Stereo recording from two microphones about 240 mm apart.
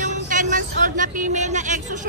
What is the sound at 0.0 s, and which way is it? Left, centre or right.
Vehicle, right.